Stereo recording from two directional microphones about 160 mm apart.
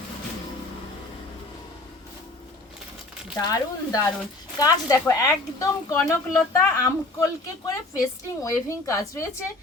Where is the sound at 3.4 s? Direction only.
25° left (ahead or behind).